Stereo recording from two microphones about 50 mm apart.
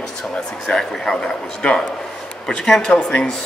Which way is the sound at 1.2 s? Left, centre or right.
Centre.